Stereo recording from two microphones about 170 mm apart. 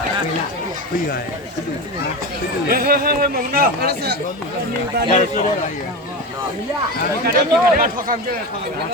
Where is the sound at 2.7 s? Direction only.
60° right (ahead or behind).